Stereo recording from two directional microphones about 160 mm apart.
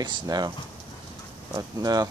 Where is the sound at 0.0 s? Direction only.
25° right (ahead or behind).